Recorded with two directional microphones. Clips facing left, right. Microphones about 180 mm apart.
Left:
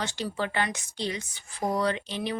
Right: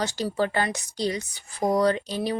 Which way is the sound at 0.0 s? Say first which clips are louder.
Right 5 dB; 40° right (ahead or behind).